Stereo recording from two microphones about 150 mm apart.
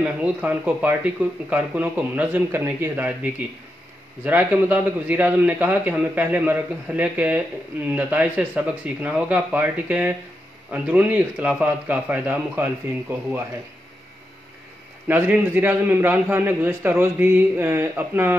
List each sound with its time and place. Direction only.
0.0 s a man's voice: 10° right (ahead or behind)
4.2 s a man's voice: 10° right (ahead or behind)
15.0 s a man's voice: 15° right (ahead or behind)